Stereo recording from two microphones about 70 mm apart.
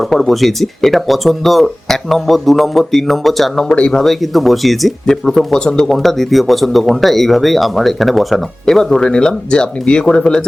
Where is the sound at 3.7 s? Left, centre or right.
Centre.